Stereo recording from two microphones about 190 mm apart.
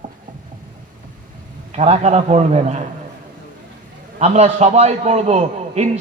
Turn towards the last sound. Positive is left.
turn(degrees=-35)  # may be behind; listen again after turning